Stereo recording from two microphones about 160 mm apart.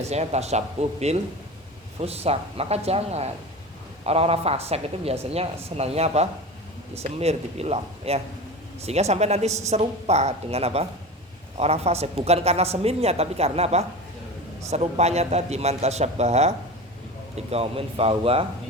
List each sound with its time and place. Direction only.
0.1 s speech: 45° right (ahead or behind)